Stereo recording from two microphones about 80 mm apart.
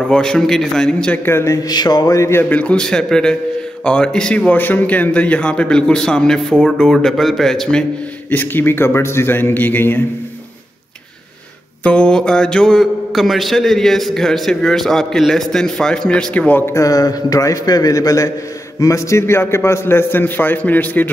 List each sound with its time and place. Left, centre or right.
0.1 s a man's voice: centre
1.1 s a man's voice: left
1.6 s a sound: left
2.1 s a man's voice: left
2.5 s a man's voice: centre
8.3 s a man's voice: left
11.8 s a man's voice: centre
16.7 s a man's voice: left